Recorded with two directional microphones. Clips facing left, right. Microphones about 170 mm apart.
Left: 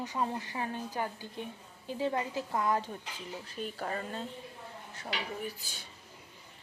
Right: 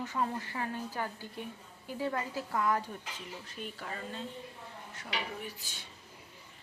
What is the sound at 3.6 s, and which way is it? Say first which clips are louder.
Speech: left 5 dB; 45° left (ahead or behind).